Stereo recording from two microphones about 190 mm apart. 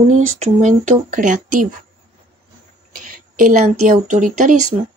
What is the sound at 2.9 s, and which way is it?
Speech, 45° right (ahead or behind).